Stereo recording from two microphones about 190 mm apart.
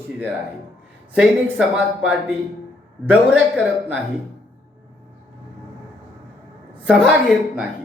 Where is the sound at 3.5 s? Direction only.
5° right (ahead or behind).